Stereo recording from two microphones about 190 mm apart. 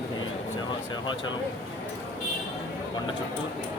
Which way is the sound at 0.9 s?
25° left (ahead or behind).